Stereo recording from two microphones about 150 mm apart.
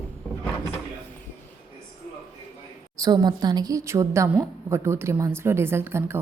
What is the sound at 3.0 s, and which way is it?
A woman's voice, 25° right (ahead or behind).